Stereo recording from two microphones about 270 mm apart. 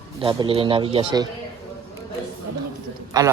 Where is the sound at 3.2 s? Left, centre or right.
Centre.